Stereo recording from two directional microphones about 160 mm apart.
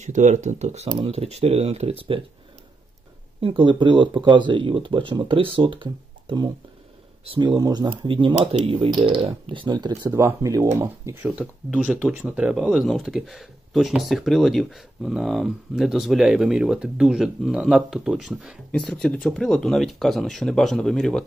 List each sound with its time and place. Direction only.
0.0 s speech: 50° right (ahead or behind)
3.3 s speech: 35° right (ahead or behind)
11.2 s speech: 10° right (ahead or behind)